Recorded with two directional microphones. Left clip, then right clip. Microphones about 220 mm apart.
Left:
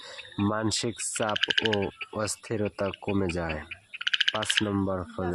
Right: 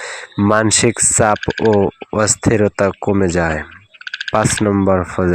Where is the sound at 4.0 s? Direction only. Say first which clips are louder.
Even; 30° left (ahead or behind).